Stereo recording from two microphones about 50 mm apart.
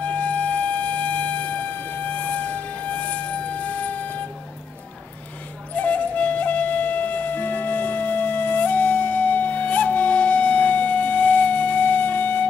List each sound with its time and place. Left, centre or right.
0.0 s wind instrument: left
5.8 s music: left